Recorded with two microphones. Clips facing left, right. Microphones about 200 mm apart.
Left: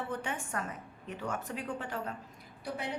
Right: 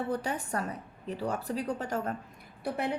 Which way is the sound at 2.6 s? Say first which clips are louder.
Right 6 dB; 55° right (ahead or behind).